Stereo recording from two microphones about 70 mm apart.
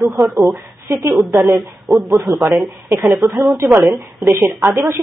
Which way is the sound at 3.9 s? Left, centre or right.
Right.